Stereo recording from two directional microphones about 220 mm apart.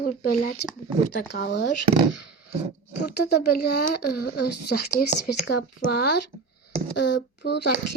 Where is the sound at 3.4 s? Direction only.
45° left (ahead or behind).